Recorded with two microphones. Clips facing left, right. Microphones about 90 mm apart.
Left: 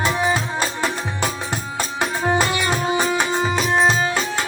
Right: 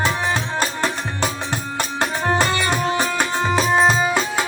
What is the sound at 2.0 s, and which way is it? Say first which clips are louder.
Music: even; 10° left (ahead or behind).